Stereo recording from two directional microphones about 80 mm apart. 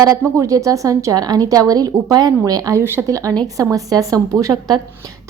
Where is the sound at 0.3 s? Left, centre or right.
Right.